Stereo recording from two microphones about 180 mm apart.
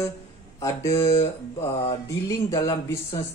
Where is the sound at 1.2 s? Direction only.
35° left (ahead or behind).